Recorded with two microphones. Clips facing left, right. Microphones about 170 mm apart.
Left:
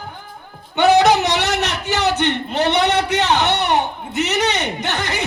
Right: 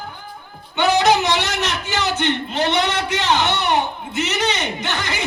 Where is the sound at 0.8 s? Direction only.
65° left (ahead or behind).